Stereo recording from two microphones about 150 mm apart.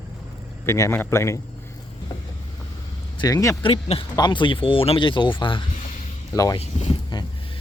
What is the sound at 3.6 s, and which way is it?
Speech, 40° left (ahead or behind).